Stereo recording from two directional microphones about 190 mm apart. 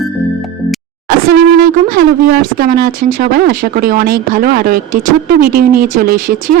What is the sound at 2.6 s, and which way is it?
Speech, 55° right (ahead or behind).